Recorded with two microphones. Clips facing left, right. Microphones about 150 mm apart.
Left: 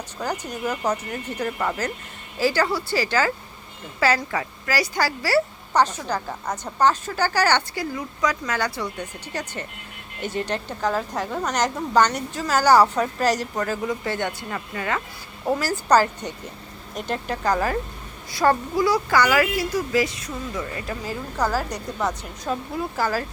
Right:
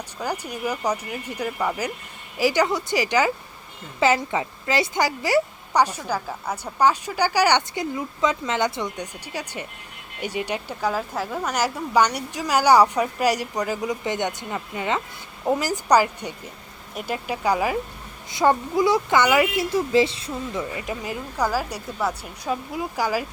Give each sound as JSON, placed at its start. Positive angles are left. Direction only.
{"t": 0.2, "sound": "speech", "side_deg": -10}